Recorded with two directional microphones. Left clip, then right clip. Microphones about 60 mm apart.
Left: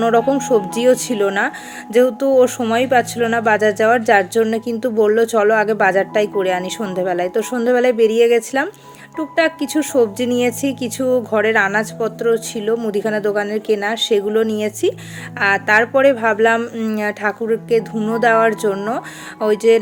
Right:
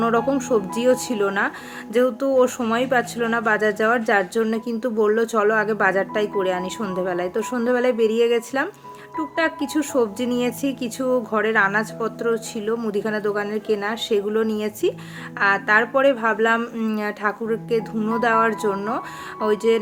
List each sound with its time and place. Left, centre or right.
0.0 s speech: centre
13.0 s speech: left
16.6 s speech: centre
17.0 s speech: left